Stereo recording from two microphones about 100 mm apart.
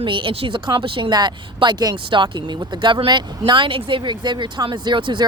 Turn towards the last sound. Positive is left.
turn(degrees=-55)  # may be behind; listen again after turning